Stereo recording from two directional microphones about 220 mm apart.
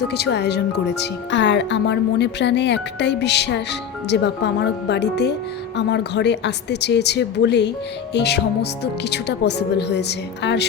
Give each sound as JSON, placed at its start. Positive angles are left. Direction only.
{"t": 0.1, "sound": "speech", "side_deg": 50}